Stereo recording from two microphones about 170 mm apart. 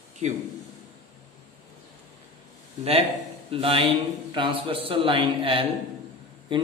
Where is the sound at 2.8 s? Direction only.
35° right (ahead or behind).